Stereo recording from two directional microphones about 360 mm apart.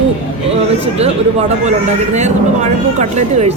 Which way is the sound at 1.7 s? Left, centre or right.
Centre.